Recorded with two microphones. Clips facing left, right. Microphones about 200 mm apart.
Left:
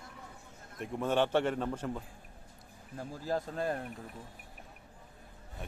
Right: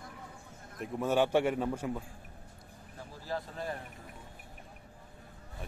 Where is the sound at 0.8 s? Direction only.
5° right (ahead or behind).